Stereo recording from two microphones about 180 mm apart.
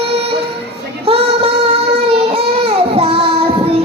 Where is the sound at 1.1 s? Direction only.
30° right (ahead or behind).